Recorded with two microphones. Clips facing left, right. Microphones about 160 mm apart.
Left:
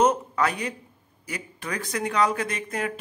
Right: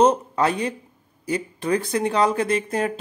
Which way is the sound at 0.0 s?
30° right (ahead or behind).